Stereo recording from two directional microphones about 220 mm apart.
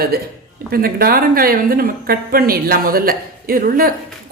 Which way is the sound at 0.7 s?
40° right (ahead or behind).